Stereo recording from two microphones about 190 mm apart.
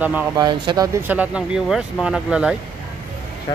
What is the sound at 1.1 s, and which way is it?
Speech, 5° right (ahead or behind).